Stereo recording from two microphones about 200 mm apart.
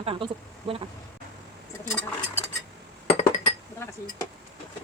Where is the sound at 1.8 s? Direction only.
5° left (ahead or behind).